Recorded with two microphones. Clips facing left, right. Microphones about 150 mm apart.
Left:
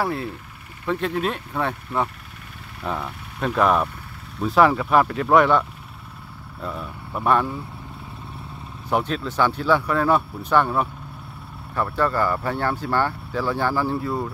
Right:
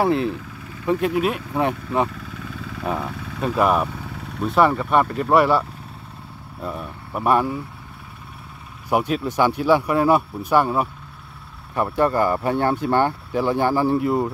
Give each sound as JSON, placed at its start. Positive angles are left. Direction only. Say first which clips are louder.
{"t": 0.0, "sound": "speech", "louder": "right 6 dB", "side_deg": -20}
{"t": 0.8, "sound": "speech", "louder": "right 4 dB", "side_deg": -10}
{"t": 8.9, "sound": "speech", "louder": "right 3 dB", "side_deg": -10}